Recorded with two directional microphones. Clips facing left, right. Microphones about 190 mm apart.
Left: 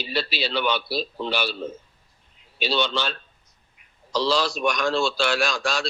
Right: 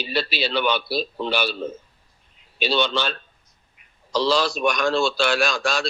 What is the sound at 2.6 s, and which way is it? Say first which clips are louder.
A man's voice: right 2 dB; 55° right (ahead or behind).